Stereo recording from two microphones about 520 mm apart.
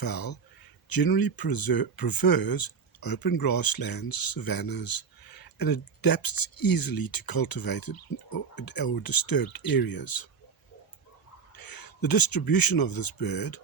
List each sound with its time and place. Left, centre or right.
0.0 s speech: left
11.5 s speech: left